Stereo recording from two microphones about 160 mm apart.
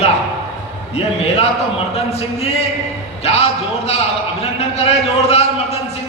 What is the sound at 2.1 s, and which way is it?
Speech, 40° left (ahead or behind).